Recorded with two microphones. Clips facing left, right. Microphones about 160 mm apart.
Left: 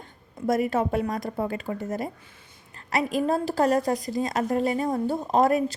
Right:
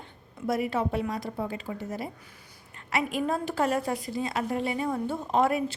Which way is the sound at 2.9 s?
40° left (ahead or behind).